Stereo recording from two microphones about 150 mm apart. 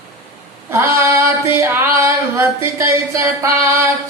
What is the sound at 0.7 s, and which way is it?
Female singing, 15° right (ahead or behind).